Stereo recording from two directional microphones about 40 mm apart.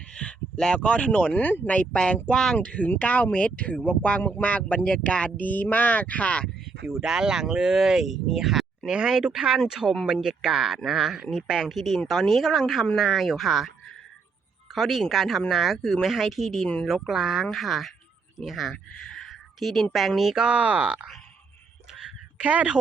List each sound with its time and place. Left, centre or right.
0.1 s speech: left
1.3 s speech: left
2.3 s speech: centre
2.6 s speech: left
4.4 s speech: left
6.8 s speech: centre
9.0 s speech: centre
10.8 s speech: centre
14.8 s speech: centre
20.3 s speech: right
20.6 s speech: right
22.4 s speech: right